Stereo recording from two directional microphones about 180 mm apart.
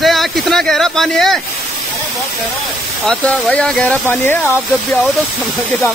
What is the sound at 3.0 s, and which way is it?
Speech, centre (ahead or behind).